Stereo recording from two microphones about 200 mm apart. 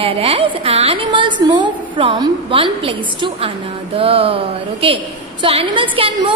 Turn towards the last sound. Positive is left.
turn(degrees=-25)  # may be behind; listen again after turning